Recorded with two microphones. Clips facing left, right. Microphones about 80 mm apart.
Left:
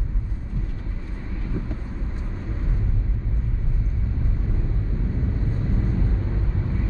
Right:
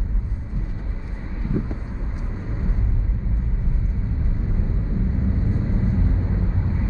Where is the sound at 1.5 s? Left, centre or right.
Centre.